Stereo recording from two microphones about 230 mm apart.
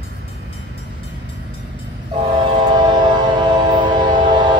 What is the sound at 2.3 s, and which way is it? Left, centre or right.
Train, right.